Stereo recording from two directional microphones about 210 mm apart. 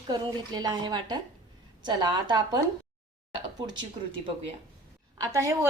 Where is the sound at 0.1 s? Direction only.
20° right (ahead or behind).